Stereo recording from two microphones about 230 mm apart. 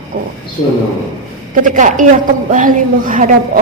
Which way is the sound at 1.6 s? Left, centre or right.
Right.